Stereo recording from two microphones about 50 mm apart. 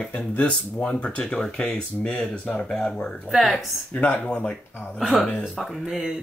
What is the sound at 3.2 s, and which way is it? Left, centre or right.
Speech, centre.